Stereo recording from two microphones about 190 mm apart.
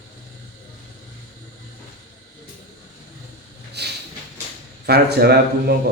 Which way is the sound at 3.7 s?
60° right (ahead or behind).